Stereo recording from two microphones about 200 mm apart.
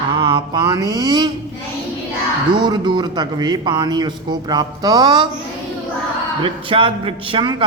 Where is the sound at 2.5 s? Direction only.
20° right (ahead or behind).